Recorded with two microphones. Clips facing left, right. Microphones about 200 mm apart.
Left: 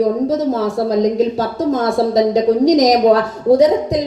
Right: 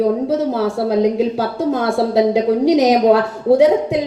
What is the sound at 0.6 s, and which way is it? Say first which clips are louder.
Speech: even; 10° right (ahead or behind).